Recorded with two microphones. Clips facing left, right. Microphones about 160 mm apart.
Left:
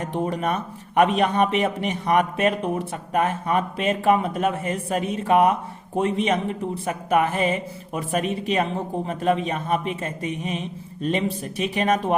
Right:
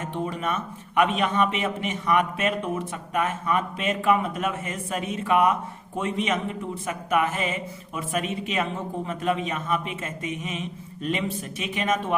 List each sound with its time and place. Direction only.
0.0 s a man's voice: 40° left (ahead or behind)